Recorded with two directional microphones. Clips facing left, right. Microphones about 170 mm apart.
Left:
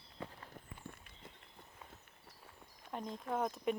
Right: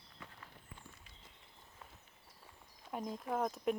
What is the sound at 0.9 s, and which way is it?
Walk, 55° left (ahead or behind).